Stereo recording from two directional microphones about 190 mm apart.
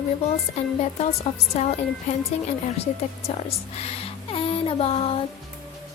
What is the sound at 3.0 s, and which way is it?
Speech, 35° left (ahead or behind).